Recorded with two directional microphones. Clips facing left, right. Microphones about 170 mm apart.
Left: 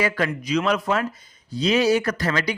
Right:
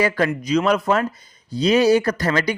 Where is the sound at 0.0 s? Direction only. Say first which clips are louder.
Right 4 dB; 40° right (ahead or behind).